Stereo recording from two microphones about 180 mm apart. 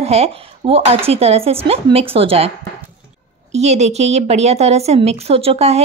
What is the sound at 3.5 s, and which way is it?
Speech, 35° right (ahead or behind).